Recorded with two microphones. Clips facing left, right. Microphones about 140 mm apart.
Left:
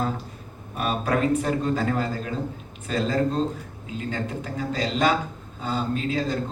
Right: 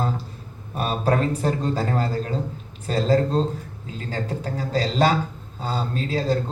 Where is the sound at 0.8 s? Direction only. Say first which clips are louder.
Right 2 dB; 35° right (ahead or behind).